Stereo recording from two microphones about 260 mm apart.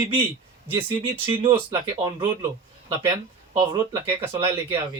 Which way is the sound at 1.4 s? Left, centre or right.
Centre.